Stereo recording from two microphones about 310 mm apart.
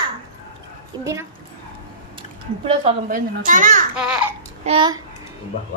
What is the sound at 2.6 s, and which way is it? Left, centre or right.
A child's voice, right.